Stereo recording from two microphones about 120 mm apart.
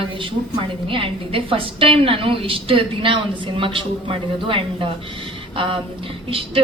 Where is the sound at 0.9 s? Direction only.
50° right (ahead or behind).